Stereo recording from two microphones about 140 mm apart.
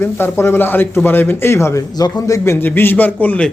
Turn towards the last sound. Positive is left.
turn(degrees=10)  # may be behind; listen again after turning